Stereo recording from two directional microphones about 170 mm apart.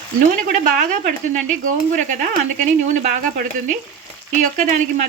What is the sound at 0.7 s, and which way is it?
Stir, 50° right (ahead or behind).